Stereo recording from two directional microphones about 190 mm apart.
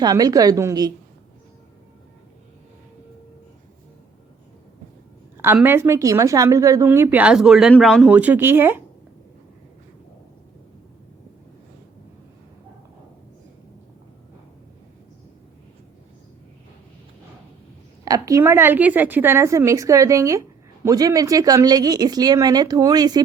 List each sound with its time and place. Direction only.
0.0 s speech: 20° right (ahead or behind)
5.5 s speech: 10° right (ahead or behind)
18.0 s speech: 20° right (ahead or behind)